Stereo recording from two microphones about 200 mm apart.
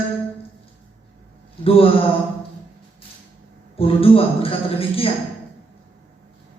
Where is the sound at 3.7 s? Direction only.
30° left (ahead or behind).